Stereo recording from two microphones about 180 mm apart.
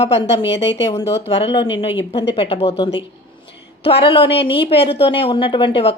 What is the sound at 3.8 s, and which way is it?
A woman's voice, 35° left (ahead or behind).